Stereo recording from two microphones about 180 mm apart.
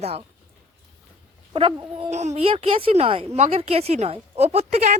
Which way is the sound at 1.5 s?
30° right (ahead or behind).